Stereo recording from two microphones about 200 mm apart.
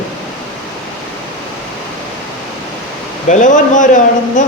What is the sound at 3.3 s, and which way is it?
Speech, 40° left (ahead or behind).